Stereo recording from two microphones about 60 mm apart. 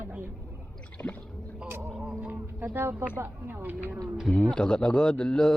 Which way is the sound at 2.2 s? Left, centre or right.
Right.